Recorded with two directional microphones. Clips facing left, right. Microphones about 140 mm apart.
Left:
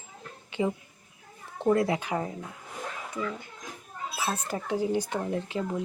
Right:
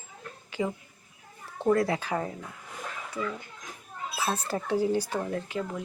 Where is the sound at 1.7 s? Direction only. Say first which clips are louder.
Even; 20° left (ahead or behind).